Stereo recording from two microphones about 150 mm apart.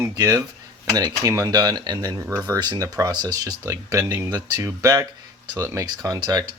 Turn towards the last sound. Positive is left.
turn(degrees=-25)  # may be behind; listen again after turning